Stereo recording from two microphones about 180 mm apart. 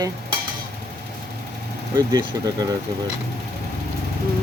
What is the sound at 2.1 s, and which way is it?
Speech, 20° right (ahead or behind).